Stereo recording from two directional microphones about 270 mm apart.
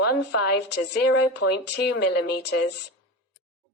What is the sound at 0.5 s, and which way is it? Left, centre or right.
A woman's voice, left.